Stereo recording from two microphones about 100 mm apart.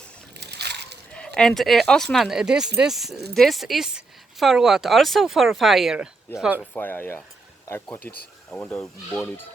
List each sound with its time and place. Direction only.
1.1 s speech: 10° left (ahead or behind); by 6.7 s 10° right (ahead or behind)
6.7 s speech: 20° left (ahead or behind)